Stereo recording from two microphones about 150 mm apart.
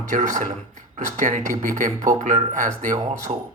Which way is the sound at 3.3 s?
45° right (ahead or behind).